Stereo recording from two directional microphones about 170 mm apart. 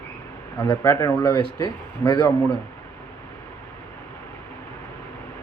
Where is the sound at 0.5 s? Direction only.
15° left (ahead or behind).